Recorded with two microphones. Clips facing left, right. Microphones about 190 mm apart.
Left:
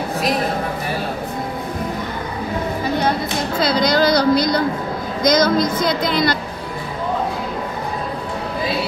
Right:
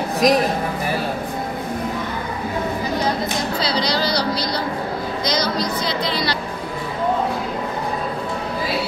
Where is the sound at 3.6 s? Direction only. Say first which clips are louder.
Left 7 dB; 50° left (ahead or behind).